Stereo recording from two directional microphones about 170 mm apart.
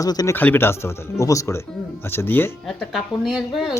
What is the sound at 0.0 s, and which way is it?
Speech, 20° left (ahead or behind).